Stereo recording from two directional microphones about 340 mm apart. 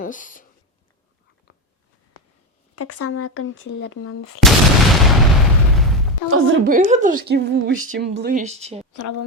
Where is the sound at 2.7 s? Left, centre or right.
Left.